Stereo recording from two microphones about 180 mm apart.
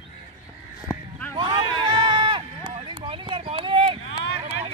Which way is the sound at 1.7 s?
25° right (ahead or behind).